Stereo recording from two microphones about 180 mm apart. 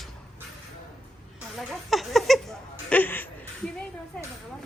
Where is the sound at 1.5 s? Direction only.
Centre (ahead or behind).